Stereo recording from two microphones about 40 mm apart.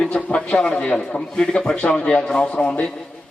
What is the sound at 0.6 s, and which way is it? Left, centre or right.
A man's voice, left.